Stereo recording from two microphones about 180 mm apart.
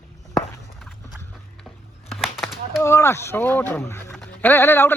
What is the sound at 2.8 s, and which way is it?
Speech, 15° left (ahead or behind).